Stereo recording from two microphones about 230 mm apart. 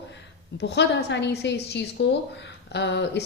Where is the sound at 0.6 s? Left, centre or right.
Left.